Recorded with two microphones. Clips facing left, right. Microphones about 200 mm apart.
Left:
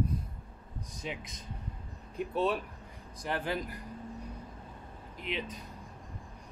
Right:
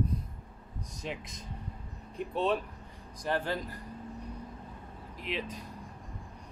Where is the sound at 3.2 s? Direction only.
15° left (ahead or behind).